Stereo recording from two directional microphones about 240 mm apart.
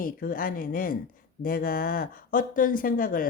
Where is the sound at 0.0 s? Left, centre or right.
Left.